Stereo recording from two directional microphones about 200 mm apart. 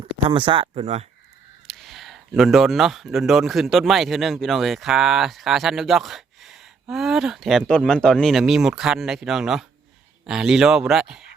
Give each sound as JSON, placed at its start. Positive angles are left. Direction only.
{"t": 0.3, "sound": "speech", "side_deg": -25}
{"t": 1.6, "sound": "speech", "side_deg": 0}